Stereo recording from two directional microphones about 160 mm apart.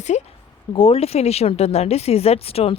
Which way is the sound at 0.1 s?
45° left (ahead or behind).